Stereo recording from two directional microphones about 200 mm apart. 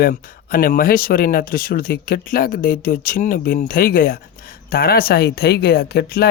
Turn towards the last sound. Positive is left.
turn(degrees=50)  # may be behind; listen again after turning